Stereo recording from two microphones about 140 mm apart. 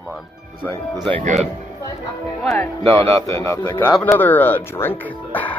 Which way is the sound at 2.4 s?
5° left (ahead or behind).